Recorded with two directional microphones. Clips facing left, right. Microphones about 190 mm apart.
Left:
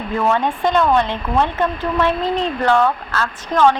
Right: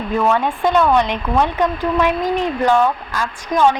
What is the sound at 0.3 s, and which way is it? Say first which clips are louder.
Speech: right 1 dB; 10° right (ahead or behind).